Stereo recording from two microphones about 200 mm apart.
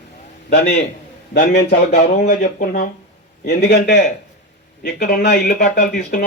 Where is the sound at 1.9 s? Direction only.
35° left (ahead or behind).